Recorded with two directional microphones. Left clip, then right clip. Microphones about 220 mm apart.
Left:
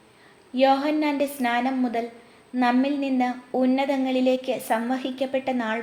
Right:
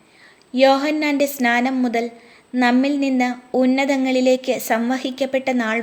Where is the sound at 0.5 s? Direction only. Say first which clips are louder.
Right 5 dB; 50° right (ahead or behind).